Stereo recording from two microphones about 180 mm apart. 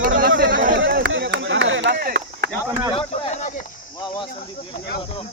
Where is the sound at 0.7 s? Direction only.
90° right; by 2.5 s 60° right (ahead or behind).